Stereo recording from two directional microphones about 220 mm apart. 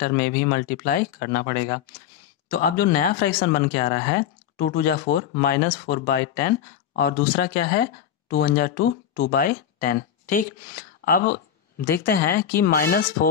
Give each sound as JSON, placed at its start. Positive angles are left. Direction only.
{"t": 0.0, "sound": "speech", "side_deg": 40}